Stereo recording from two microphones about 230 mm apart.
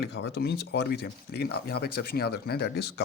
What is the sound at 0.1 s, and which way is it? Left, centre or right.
Speech, left.